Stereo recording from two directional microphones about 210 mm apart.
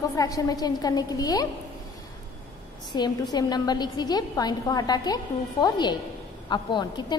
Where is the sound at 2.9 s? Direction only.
20° left (ahead or behind).